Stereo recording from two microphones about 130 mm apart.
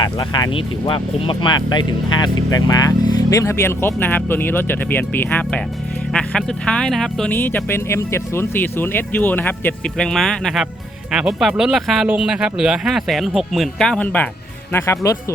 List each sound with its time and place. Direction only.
0.0 s speech: 35° left (ahead or behind); by 7.3 s 5° left (ahead or behind)
7.3 s speech: 15° left (ahead or behind)